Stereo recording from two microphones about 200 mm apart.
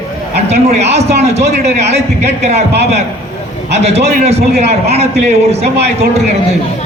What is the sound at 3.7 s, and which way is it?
A man's voice, 30° right (ahead or behind).